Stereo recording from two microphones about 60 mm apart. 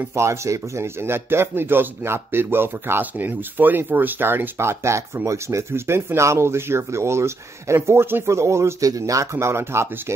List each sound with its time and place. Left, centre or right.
0.1 s speech: right
8.8 s speech: right